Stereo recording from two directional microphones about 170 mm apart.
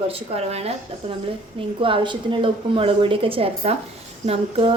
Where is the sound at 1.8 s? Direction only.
30° right (ahead or behind).